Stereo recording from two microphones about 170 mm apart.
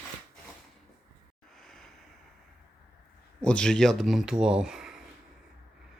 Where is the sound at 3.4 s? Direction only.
5° left (ahead or behind).